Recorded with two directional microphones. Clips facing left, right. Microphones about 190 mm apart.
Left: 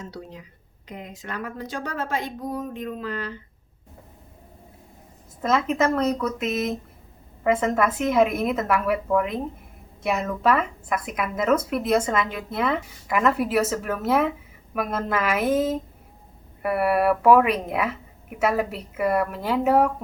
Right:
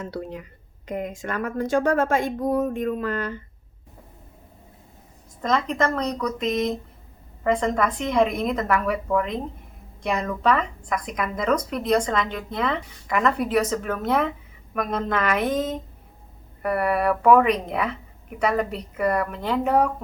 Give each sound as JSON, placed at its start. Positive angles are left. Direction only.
{"t": 0.0, "sound": "a woman's voice", "side_deg": -60}
{"t": 5.4, "sound": "speech", "side_deg": 5}